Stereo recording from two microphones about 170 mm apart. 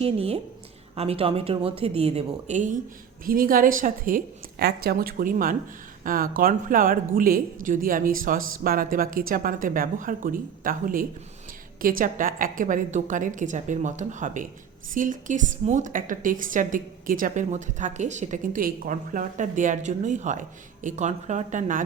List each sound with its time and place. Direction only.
0.0 s speech: 35° right (ahead or behind)
3.2 s a woman's voice: 55° right (ahead or behind)